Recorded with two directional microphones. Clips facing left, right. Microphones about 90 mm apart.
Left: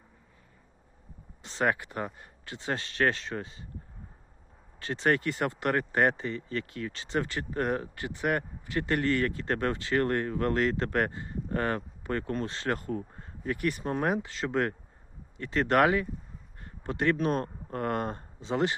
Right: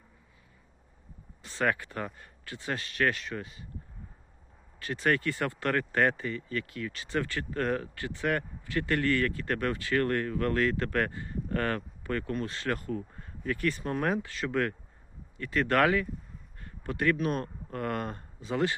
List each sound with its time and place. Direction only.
1.4 s speech: 25° left (ahead or behind)
4.8 s speech: 25° left (ahead or behind)
13.6 s speech: 20° left (ahead or behind)